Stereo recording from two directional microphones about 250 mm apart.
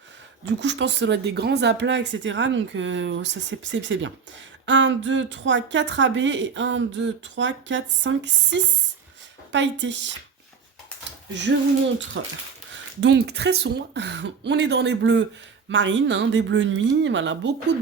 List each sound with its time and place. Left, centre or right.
0.4 s a woman's voice: right
12.1 s a woman's voice: right